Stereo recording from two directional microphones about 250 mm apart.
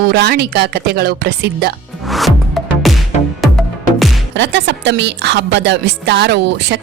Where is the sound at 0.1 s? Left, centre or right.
Right.